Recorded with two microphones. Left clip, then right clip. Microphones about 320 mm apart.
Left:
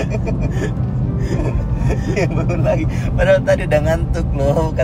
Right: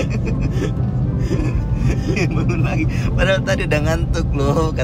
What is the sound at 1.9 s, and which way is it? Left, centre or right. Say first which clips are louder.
Speech: left 2 dB; centre.